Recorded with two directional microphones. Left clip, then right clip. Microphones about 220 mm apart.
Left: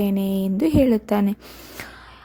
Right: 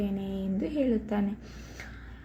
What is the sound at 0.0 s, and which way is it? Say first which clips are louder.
A woman's voice: left 10 dB; 50° left (ahead or behind).